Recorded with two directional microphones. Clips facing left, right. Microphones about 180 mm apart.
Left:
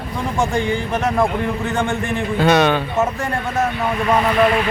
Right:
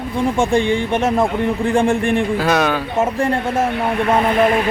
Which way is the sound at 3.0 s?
30° right (ahead or behind).